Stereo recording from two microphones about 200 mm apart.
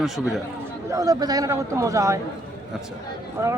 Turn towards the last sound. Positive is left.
turn(degrees=-15)  # may be behind; listen again after turning